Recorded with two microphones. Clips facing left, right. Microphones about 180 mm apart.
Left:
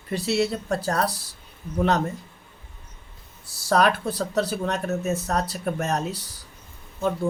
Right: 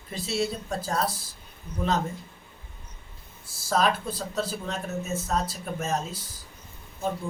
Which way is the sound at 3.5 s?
70° left (ahead or behind).